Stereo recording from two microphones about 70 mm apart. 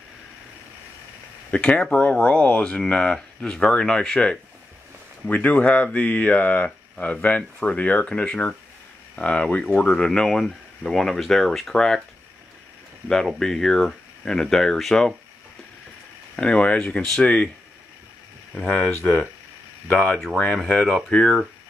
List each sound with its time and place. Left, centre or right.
1.5 s speech: centre
5.3 s speech: left; by 12.0 s centre
13.4 s speech: centre
16.3 s speech: centre
18.5 s speech: centre